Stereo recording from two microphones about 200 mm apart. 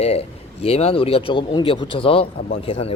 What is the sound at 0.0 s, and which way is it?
Speech, 30° left (ahead or behind).